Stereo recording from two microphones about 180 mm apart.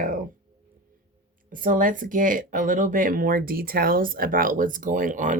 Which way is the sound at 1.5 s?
50° right (ahead or behind).